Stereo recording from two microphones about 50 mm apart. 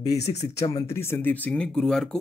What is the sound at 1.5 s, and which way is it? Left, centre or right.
Speech, centre.